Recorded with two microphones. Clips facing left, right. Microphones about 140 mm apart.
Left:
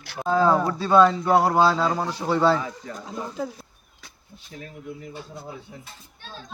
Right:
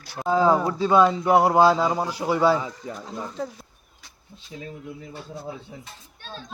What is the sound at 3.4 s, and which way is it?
Speech, 5° left (ahead or behind).